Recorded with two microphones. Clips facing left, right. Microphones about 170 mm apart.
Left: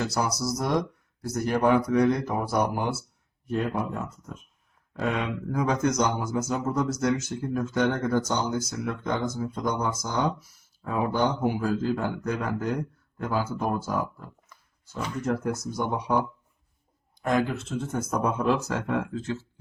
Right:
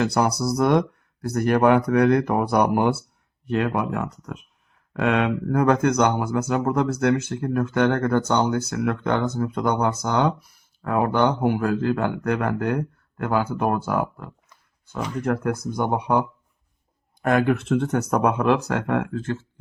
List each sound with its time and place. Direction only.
0.0 s speech: 60° right (ahead or behind)
3.4 s speech: 70° right (ahead or behind)
17.2 s speech: 60° right (ahead or behind)